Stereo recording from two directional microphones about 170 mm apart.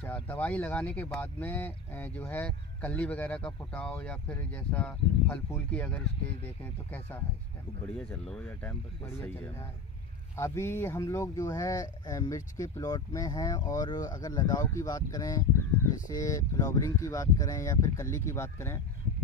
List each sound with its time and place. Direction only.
0.0 s speech: 10° left (ahead or behind)